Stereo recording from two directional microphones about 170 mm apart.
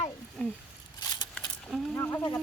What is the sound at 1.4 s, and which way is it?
Keys jangling, 5° left (ahead or behind).